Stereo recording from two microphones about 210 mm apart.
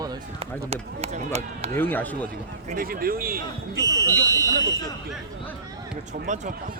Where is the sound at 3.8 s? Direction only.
15° right (ahead or behind).